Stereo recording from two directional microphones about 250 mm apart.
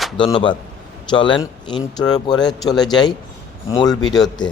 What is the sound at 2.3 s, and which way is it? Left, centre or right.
Speech, centre.